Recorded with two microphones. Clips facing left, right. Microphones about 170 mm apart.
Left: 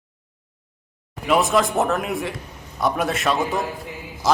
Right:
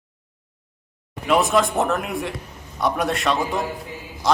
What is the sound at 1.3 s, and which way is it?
A man's voice, centre (ahead or behind).